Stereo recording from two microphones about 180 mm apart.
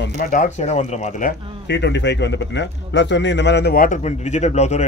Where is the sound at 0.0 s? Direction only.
50° left (ahead or behind).